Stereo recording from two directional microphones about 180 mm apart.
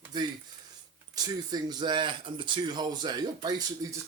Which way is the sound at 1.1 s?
20° right (ahead or behind).